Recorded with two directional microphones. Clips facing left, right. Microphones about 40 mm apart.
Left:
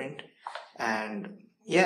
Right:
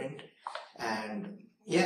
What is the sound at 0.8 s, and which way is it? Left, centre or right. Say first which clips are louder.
Speech: left 5 dB; left.